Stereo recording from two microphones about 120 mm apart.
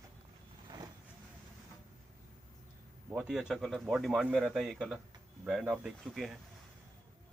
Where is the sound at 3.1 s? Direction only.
5° right (ahead or behind).